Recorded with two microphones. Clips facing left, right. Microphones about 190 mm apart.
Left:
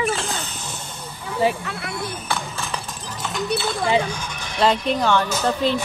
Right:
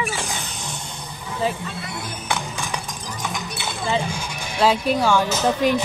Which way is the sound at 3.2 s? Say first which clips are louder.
Left 7 dB; 10° right (ahead or behind).